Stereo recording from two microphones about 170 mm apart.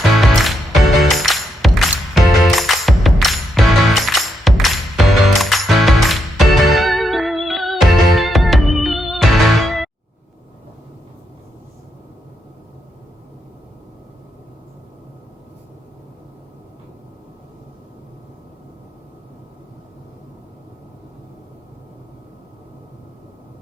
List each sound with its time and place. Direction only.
0.1 s music: centre (ahead or behind)